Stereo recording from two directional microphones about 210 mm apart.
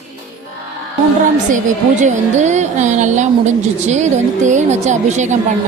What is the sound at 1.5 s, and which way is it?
A woman's voice, 35° right (ahead or behind).